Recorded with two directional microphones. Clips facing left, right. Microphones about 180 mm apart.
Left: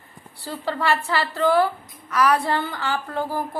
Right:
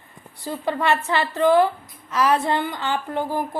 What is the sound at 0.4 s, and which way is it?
A woman's voice, 20° right (ahead or behind).